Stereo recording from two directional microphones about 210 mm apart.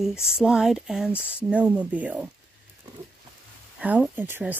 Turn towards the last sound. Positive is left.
turn(degrees=-10)  # may be behind; listen again after turning